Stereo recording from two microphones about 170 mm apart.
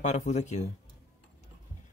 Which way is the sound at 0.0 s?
45° left (ahead or behind).